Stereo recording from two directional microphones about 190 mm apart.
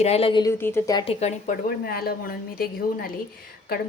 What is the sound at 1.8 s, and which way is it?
A woman's voice, 55° left (ahead or behind).